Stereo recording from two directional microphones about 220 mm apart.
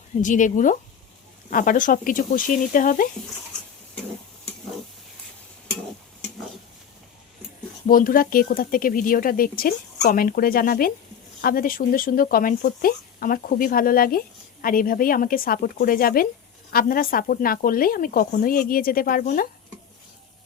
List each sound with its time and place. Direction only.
0.2 s speech: 35° left (ahead or behind)
7.9 s speech: 40° left (ahead or behind)